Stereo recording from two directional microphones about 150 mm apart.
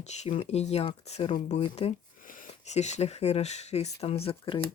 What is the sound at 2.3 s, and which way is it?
Speech, 55° left (ahead or behind).